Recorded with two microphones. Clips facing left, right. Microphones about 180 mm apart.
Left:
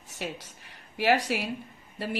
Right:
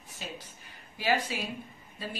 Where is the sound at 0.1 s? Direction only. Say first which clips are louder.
Left 6 dB; 75° left (ahead or behind).